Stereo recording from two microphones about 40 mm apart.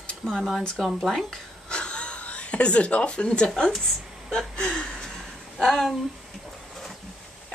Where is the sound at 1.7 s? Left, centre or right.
Left.